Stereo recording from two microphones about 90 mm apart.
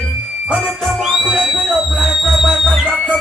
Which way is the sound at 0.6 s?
Centre (ahead or behind).